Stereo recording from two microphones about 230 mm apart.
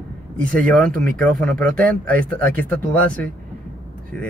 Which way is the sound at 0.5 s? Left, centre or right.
Centre.